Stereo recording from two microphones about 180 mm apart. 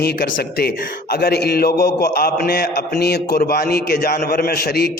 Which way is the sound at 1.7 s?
20° left (ahead or behind).